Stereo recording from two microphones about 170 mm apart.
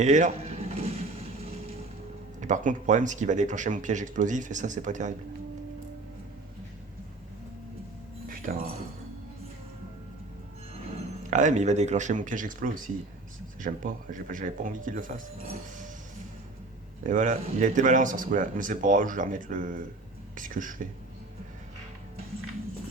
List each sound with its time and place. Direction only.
0.0 s a sound: 45° right (ahead or behind)
2.4 s speech: 45° right (ahead or behind)
8.3 s music: 60° right (ahead or behind)
11.3 s speech: 45° right (ahead or behind)
17.1 s speech: 45° right (ahead or behind)